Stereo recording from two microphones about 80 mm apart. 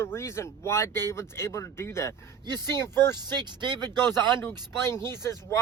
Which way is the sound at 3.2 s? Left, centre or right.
Right.